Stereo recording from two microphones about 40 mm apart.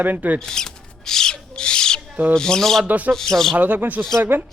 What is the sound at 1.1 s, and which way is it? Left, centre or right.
Rub, centre.